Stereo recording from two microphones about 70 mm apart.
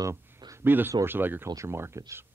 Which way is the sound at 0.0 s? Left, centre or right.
Right.